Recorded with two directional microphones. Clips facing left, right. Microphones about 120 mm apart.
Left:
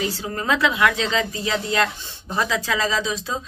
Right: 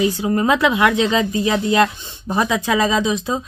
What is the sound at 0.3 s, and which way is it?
Speech, 25° right (ahead or behind).